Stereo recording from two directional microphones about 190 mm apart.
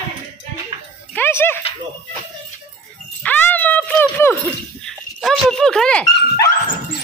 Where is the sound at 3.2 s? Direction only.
10° left (ahead or behind).